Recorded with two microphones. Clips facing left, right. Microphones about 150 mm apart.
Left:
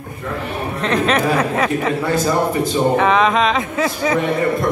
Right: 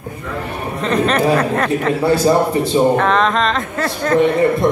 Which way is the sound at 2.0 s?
30° right (ahead or behind).